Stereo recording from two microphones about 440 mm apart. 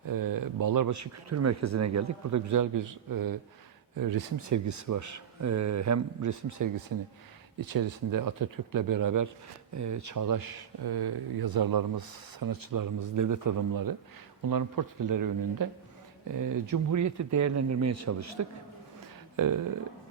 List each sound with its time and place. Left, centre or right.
0.0 s speech: right
8.1 s speech: right